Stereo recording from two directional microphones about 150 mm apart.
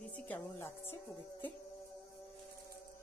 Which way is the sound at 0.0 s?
10° left (ahead or behind).